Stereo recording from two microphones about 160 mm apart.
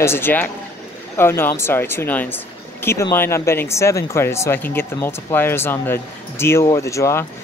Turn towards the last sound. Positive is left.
turn(degrees=20)  # may be behind; listen again after turning